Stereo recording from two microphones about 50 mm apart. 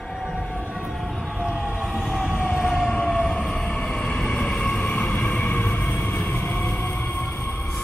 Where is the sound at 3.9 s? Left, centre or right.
Centre; by 7.3 s left.